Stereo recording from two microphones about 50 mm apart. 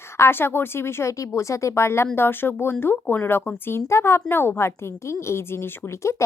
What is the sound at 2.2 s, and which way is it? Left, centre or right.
Speech, left.